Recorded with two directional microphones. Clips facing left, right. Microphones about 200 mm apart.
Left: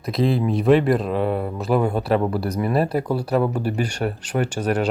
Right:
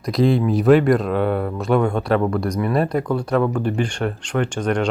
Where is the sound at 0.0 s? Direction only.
Centre (ahead or behind).